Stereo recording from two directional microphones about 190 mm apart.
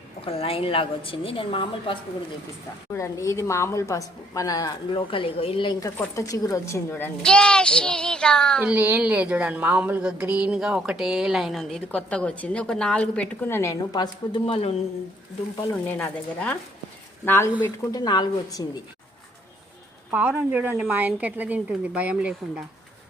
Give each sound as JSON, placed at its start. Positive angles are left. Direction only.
{"t": 0.3, "sound": "a woman's voice", "side_deg": 30}
{"t": 2.9, "sound": "a woman's voice", "side_deg": 15}
{"t": 8.6, "sound": "speech", "side_deg": -10}
{"t": 15.9, "sound": "a woman's voice", "side_deg": 5}
{"t": 20.1, "sound": "a woman's voice", "side_deg": -10}